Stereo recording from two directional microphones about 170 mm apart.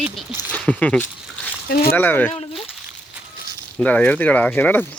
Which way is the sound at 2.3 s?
35° left (ahead or behind).